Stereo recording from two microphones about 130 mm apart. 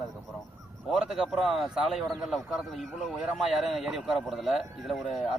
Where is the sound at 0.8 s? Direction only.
Centre (ahead or behind).